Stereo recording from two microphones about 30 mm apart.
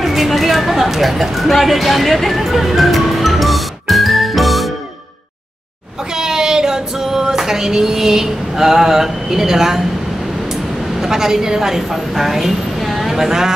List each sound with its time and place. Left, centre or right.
0.0 s a sound: centre
6.1 s female singing: centre
11.0 s a woman's voice: centre